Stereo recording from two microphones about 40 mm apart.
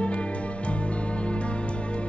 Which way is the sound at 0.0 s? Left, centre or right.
Left.